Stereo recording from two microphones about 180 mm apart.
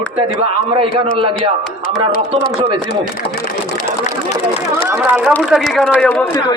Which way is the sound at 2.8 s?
50° left (ahead or behind).